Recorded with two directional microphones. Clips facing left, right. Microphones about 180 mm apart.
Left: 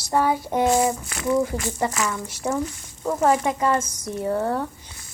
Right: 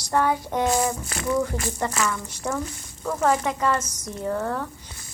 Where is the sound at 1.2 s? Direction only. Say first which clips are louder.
Left 3 dB; 25° left (ahead or behind).